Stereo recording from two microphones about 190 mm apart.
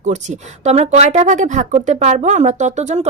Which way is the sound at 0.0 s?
40° right (ahead or behind).